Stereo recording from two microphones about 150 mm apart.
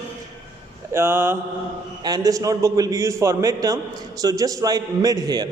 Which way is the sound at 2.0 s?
25° right (ahead or behind).